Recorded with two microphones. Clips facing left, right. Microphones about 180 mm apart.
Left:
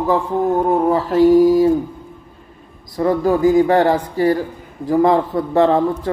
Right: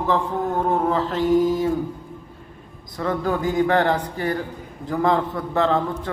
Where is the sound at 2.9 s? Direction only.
35° left (ahead or behind).